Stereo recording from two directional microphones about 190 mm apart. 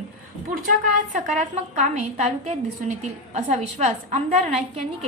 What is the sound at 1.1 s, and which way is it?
A woman's voice, 40° right (ahead or behind).